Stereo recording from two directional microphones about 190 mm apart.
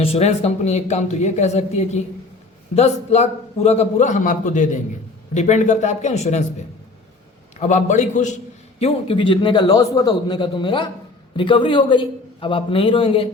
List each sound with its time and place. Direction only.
0.0 s speech: 35° left (ahead or behind)
7.7 s speech: 40° left (ahead or behind)
8.8 s a man's voice: 25° left (ahead or behind)